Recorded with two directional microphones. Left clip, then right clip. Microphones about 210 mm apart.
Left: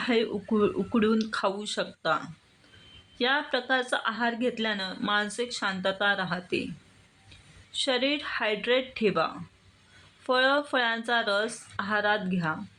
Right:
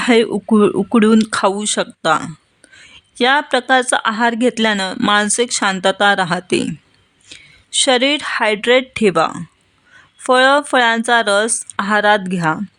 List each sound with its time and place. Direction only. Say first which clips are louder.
0.0 s speech: right 13 dB; 50° right (ahead or behind)